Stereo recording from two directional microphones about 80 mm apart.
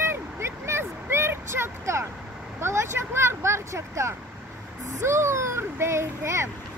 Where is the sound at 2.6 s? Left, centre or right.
Right.